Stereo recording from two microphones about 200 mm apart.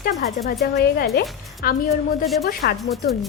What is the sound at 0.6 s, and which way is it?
Speech, 55° left (ahead or behind).